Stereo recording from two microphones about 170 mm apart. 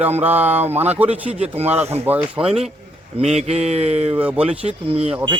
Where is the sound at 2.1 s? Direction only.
10° right (ahead or behind).